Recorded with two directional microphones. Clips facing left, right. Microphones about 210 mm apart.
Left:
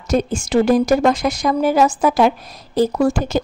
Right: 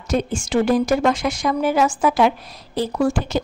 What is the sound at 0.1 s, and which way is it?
A woman's voice, 40° left (ahead or behind).